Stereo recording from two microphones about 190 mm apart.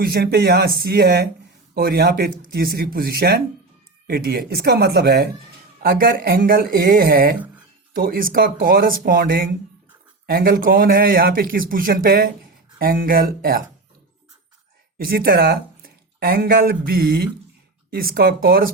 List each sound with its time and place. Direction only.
0.0 s a man's voice: 55° right (ahead or behind)
14.9 s a man's voice: 50° right (ahead or behind)